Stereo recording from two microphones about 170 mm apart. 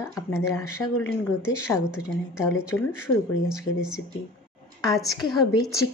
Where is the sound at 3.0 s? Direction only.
5° right (ahead or behind).